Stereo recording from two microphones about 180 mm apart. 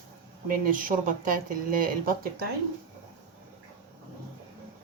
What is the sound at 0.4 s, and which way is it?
Speech, 50° right (ahead or behind).